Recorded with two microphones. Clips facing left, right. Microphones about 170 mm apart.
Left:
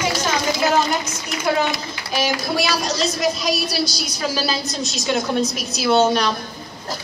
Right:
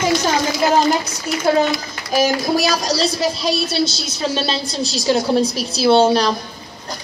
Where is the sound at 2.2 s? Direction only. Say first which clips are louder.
Right 5 dB; 40° right (ahead or behind).